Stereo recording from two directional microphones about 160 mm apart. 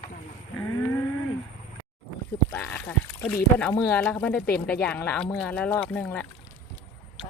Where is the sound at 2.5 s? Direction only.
10° left (ahead or behind).